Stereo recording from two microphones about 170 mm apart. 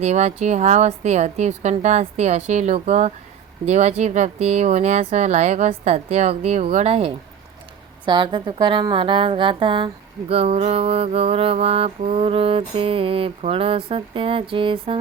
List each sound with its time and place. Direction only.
0.0 s a woman's voice: 40° right (ahead or behind)
8.0 s a woman's voice: 25° right (ahead or behind)